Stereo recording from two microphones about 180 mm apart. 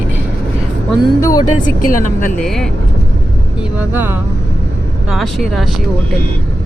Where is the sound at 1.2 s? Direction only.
20° left (ahead or behind).